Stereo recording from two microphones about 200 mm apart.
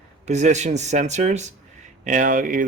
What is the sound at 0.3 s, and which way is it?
Speech, 35° right (ahead or behind).